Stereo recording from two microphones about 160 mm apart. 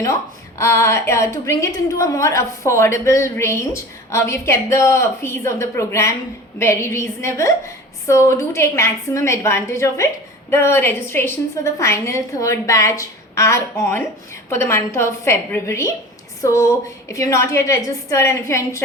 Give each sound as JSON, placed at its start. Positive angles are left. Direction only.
{"t": 0.6, "sound": "a woman's voice", "side_deg": 20}